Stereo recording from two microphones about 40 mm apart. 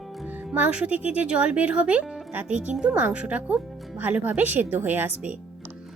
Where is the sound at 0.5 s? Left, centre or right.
Right.